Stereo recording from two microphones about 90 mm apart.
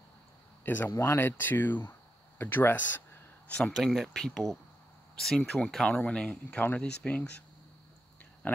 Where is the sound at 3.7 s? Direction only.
Centre (ahead or behind); by 6.9 s 15° left (ahead or behind).